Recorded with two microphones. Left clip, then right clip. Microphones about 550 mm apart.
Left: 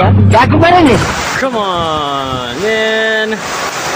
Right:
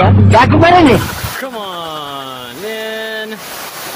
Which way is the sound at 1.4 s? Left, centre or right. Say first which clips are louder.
Left 9 dB; right.